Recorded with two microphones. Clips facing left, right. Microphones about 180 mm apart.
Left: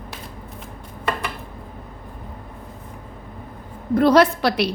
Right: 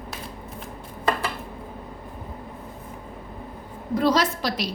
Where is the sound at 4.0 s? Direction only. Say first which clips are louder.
Left 7 dB; 60° left (ahead or behind).